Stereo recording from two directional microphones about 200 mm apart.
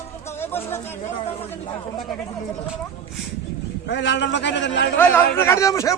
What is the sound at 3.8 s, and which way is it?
A man's voice, 60° left (ahead or behind).